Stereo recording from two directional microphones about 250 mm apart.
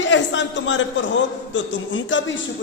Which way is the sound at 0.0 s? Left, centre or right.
Left.